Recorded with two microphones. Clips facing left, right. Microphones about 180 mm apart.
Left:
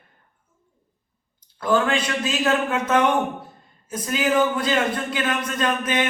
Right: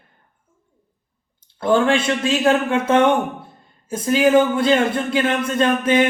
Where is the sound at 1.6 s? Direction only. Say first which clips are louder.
Right 4 dB; 30° right (ahead or behind).